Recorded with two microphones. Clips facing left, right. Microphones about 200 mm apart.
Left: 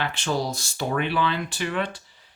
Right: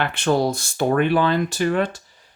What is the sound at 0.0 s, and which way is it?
Speech, 55° right (ahead or behind).